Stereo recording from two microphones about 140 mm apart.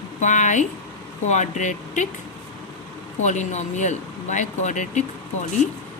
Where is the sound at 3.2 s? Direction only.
55° left (ahead or behind).